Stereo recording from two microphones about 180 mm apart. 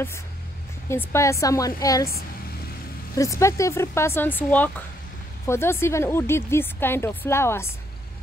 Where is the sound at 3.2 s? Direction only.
15° left (ahead or behind).